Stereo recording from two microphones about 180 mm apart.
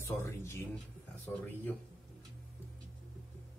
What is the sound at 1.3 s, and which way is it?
Speech, 5° left (ahead or behind).